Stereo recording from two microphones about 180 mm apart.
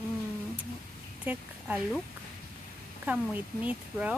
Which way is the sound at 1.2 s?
10° right (ahead or behind).